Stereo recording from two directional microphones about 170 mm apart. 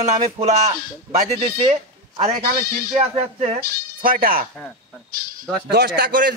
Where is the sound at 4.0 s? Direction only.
55° right (ahead or behind).